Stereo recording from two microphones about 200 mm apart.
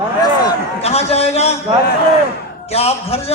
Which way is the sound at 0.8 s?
30° left (ahead or behind).